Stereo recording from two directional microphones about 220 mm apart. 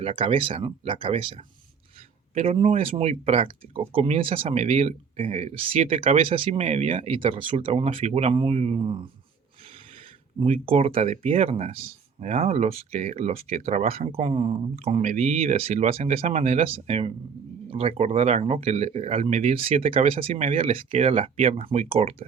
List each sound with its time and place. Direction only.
0.0 s speech: 25° right (ahead or behind)
10.4 s speech: 25° right (ahead or behind)